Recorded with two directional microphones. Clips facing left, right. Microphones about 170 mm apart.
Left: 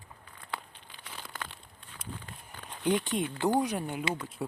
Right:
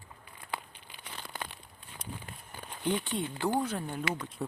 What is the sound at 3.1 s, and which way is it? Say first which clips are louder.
Speech: left 3 dB; 20° left (ahead or behind).